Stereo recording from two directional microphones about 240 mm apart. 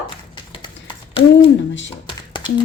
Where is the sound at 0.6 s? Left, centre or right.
Left.